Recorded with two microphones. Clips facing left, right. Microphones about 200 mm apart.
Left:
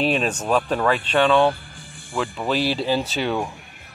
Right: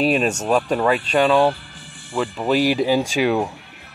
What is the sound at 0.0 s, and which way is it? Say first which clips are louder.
Speech: right 3 dB; 5° right (ahead or behind).